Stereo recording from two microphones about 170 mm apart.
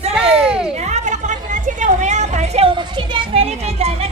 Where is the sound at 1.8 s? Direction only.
45° right (ahead or behind).